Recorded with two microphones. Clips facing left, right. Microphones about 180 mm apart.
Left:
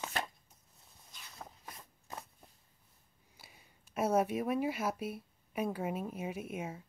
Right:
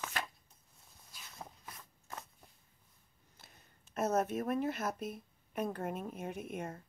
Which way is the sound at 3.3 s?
10° left (ahead or behind).